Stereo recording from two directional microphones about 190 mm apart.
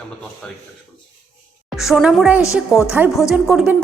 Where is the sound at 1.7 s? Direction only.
Centre (ahead or behind).